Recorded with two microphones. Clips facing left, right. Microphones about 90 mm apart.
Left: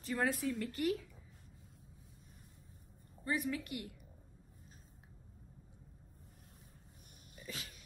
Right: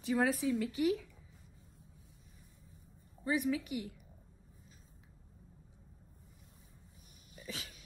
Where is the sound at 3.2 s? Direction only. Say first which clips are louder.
Right 4 dB; 5° right (ahead or behind).